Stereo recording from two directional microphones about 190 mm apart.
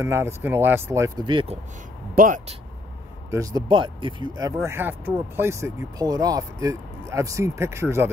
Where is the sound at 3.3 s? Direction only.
20° right (ahead or behind).